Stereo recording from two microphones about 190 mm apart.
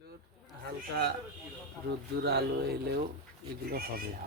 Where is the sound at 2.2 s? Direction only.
60° right (ahead or behind).